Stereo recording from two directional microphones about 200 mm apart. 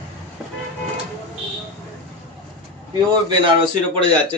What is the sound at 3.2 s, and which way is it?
Speech, 25° right (ahead or behind).